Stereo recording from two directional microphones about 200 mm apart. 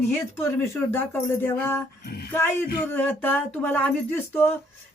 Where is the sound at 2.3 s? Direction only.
10° left (ahead or behind).